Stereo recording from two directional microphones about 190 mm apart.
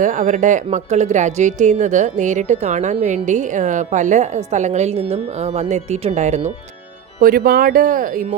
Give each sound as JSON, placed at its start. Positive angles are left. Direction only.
{"t": 0.0, "sound": "a woman's voice", "side_deg": -40}
{"t": 7.2, "sound": "speech", "side_deg": -50}